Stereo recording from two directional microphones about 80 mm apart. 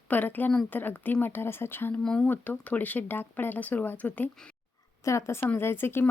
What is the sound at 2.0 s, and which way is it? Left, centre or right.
Speech, centre.